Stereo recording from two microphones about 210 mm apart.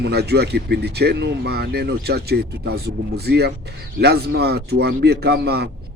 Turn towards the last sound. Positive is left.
turn(degrees=-50)  # may be behind; listen again after turning